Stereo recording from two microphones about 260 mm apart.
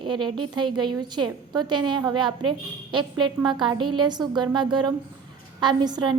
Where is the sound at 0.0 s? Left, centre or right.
Centre.